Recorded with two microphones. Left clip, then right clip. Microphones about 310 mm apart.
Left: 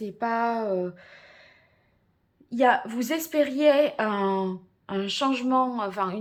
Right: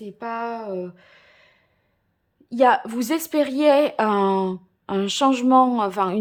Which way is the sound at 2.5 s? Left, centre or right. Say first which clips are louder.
Right 4 dB; centre.